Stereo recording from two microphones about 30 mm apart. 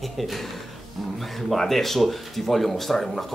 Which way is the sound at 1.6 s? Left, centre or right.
Centre.